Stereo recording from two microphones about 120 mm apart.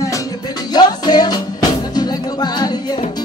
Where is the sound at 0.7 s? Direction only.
35° left (ahead or behind).